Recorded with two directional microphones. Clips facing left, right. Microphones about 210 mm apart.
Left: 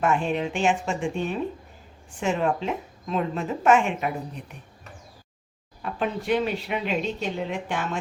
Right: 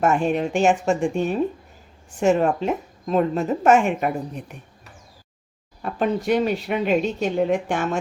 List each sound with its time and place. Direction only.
0.0 s a woman's voice: 45° right (ahead or behind)
5.8 s a woman's voice: 45° right (ahead or behind)